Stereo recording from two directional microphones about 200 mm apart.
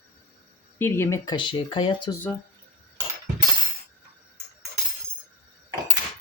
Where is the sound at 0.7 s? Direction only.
10° left (ahead or behind).